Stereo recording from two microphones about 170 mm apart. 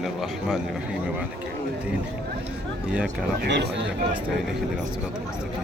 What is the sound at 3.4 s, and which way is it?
Speech, 75° right (ahead or behind).